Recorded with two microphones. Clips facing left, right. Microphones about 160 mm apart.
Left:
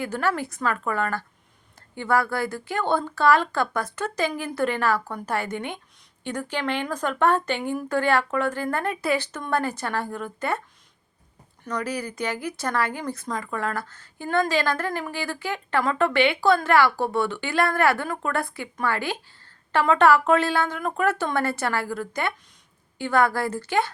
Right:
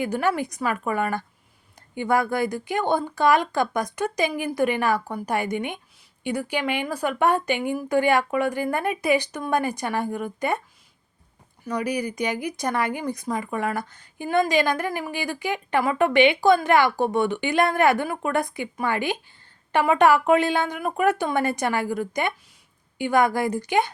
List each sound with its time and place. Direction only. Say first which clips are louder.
0.0 s speech: right 2 dB; 15° right (ahead or behind)
11.6 s speech: right 3 dB; 10° right (ahead or behind)